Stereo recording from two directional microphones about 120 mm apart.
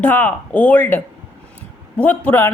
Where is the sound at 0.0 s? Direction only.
15° left (ahead or behind).